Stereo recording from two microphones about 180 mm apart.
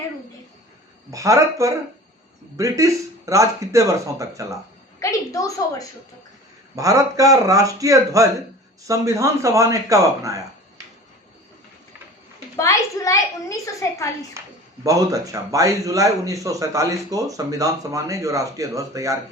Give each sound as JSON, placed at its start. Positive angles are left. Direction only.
{"t": 1.1, "sound": "speech", "side_deg": -15}
{"t": 4.9, "sound": "a child's voice", "side_deg": 20}
{"t": 6.7, "sound": "speech", "side_deg": -20}
{"t": 12.5, "sound": "a child's voice", "side_deg": 15}
{"t": 14.4, "sound": "speech", "side_deg": -15}